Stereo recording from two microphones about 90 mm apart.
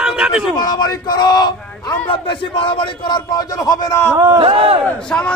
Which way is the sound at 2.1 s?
70° left (ahead or behind).